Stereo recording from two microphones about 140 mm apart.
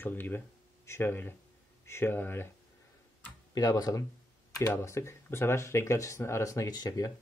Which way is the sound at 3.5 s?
25° left (ahead or behind).